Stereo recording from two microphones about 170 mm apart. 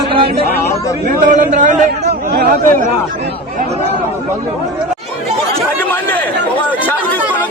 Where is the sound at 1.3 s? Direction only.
45° right (ahead or behind).